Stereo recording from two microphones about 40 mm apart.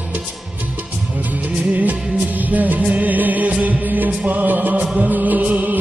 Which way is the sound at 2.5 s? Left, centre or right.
Right.